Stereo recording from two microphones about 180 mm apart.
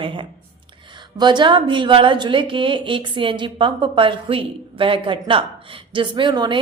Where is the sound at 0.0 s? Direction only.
25° right (ahead or behind).